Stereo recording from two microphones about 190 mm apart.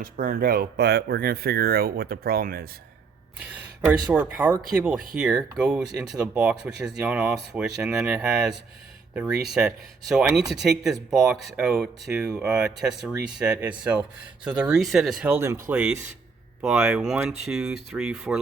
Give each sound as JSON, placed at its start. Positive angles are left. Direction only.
{"t": 0.0, "sound": "speech", "side_deg": -50}
{"t": 3.3, "sound": "speech", "side_deg": -10}
{"t": 15.4, "sound": "speech", "side_deg": -15}